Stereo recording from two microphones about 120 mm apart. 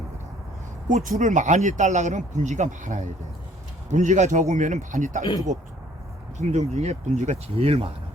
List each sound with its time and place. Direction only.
0.9 s speech: 90° right
5.2 s speech: 35° left (ahead or behind)
6.5 s speech: 65° right (ahead or behind)
7.5 s speech: 55° right (ahead or behind)